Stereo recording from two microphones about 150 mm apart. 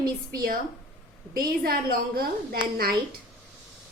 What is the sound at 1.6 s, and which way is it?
A woman's voice, 85° right.